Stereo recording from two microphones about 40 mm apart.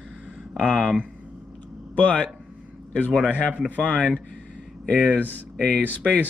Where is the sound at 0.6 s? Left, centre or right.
Left.